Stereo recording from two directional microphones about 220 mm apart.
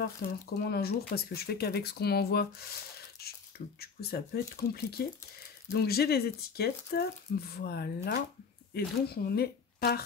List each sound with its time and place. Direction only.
0.2 s speech: 45° left (ahead or behind)